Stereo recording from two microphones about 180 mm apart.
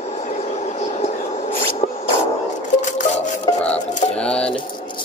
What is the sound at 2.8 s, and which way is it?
Music, 40° left (ahead or behind).